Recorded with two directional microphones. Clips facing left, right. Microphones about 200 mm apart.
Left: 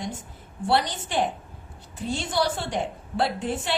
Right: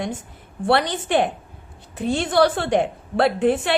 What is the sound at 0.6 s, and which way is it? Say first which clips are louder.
A woman's voice: right 4 dB; 60° right (ahead or behind).